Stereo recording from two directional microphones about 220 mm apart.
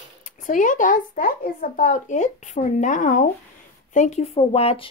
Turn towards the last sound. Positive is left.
turn(degrees=25)  # may be behind; listen again after turning